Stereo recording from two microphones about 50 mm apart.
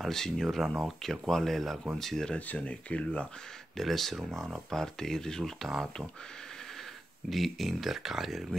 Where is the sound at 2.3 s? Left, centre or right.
Left.